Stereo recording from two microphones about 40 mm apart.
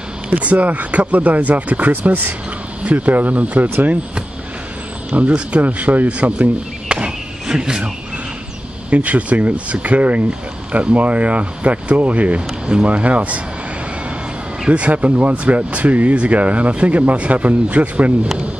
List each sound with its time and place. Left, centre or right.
0.3 s speech: right
5.1 s speech: right
6.3 s a sound: right
8.9 s speech: right
14.7 s speech: right